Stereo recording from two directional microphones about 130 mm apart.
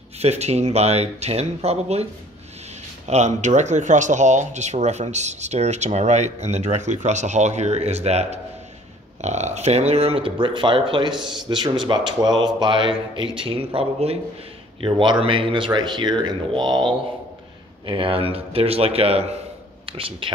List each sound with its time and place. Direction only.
0.2 s speech: 55° right (ahead or behind)
3.1 s speech: 65° right (ahead or behind); by 16.6 s 35° right (ahead or behind)
16.6 s speech: 5° left (ahead or behind)
17.8 s speech: 40° right (ahead or behind)